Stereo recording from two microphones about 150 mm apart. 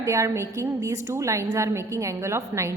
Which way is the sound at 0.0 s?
20° right (ahead or behind).